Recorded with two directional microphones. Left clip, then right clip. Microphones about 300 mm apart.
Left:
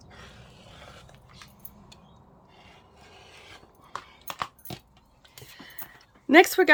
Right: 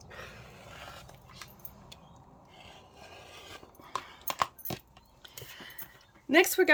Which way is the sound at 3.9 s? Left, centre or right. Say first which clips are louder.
Right 2 dB; centre.